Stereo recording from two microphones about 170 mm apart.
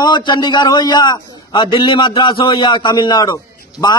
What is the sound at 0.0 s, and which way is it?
A man's voice, 25° left (ahead or behind).